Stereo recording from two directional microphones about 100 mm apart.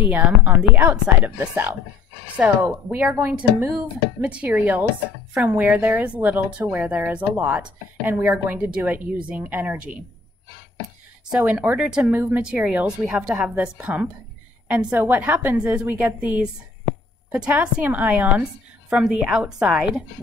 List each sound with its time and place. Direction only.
0.0 s a woman's voice: 15° right (ahead or behind)
11.4 s a woman's voice: 15° right (ahead or behind)
12.4 s a woman's voice: 10° right (ahead or behind)
13.6 s a woman's voice: 15° right (ahead or behind)